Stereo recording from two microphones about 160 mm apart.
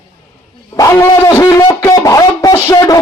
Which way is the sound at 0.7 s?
20° left (ahead or behind).